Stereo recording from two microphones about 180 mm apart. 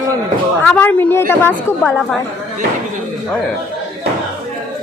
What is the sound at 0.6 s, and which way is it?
A woman's voice, 10° left (ahead or behind).